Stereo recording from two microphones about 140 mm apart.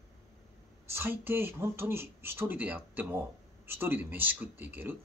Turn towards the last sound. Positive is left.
turn(degrees=-15)  # may be behind; listen again after turning